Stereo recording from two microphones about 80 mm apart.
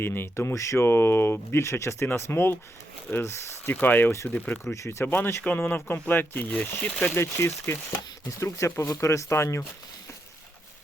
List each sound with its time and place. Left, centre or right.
0.0 s speech: left
4.6 s speech: left